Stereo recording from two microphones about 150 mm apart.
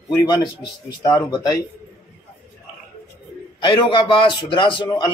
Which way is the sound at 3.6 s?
35° left (ahead or behind).